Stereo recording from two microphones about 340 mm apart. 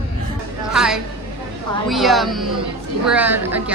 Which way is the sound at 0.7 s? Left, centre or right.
Centre.